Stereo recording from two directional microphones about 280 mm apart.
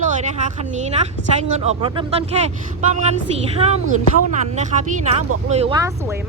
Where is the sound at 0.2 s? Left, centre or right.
Right.